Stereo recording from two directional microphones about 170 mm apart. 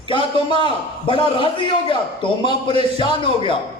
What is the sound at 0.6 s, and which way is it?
A man's voice, 30° left (ahead or behind).